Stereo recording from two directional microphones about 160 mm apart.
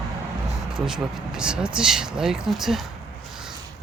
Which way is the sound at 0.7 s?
5° right (ahead or behind).